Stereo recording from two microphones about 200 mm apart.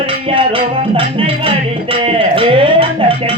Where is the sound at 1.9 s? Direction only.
25° right (ahead or behind).